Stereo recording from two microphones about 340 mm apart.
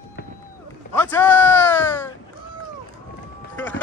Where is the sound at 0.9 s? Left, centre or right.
Centre.